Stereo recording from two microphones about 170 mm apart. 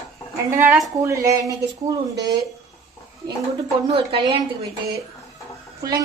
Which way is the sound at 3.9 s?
30° right (ahead or behind).